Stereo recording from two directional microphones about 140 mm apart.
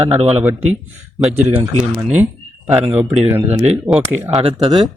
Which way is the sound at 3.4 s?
50° right (ahead or behind).